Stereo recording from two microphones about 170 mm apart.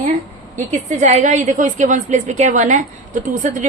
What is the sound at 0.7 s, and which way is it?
A woman's voice, 45° right (ahead or behind).